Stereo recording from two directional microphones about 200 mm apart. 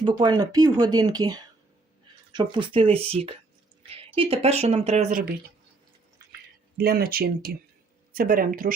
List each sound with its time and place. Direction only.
0.0 s speech: 20° right (ahead or behind)
6.7 s speech: 50° right (ahead or behind)